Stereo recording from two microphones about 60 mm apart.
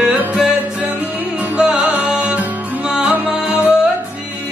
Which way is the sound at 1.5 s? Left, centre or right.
Centre.